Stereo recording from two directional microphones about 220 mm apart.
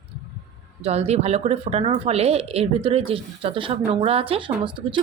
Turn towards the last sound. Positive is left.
turn(degrees=-20)  # may be behind; listen again after turning